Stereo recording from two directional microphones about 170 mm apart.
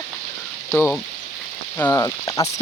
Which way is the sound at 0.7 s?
10° left (ahead or behind).